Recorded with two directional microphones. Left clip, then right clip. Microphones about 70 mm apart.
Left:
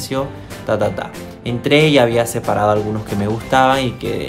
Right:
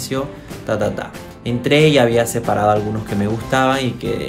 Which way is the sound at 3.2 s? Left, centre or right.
Left.